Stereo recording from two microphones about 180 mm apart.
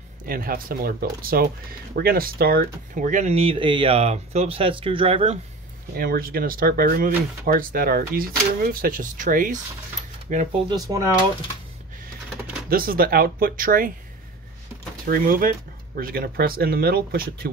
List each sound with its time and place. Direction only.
0.3 s speech: 55° right (ahead or behind); by 5.4 s 30° right (ahead or behind)
5.9 s speech: 55° right (ahead or behind)
10.9 s speech: 25° right (ahead or behind)
12.6 s speech: 55° right (ahead or behind)
15.0 s speech: 50° right (ahead or behind)